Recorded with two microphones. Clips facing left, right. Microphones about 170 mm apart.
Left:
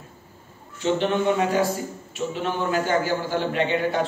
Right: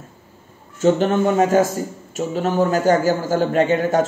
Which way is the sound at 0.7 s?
45° right (ahead or behind).